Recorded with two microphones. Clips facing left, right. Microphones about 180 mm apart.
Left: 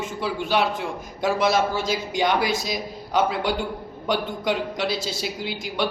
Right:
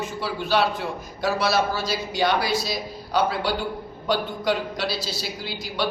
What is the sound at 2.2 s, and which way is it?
A woman's voice, 15° left (ahead or behind).